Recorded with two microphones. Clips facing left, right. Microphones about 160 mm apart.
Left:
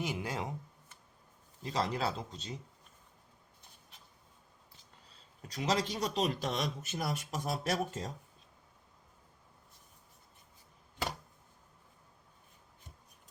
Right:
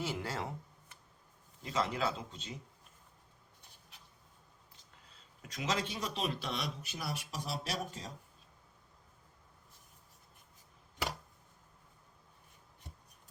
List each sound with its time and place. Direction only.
0.0 s speech: 15° left (ahead or behind)
1.6 s speech: 35° left (ahead or behind)
5.4 s speech: 35° left (ahead or behind)